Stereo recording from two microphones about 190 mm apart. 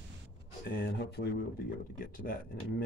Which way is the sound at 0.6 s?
60° left (ahead or behind).